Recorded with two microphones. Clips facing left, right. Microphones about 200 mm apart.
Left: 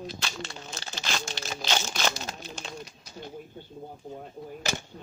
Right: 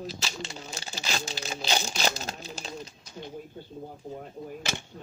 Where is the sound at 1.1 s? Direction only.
35° right (ahead or behind).